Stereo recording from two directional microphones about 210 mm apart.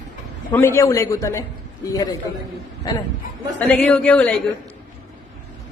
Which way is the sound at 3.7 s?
5° left (ahead or behind).